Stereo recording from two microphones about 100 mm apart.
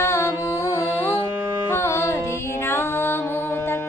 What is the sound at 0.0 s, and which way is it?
Music, 25° left (ahead or behind).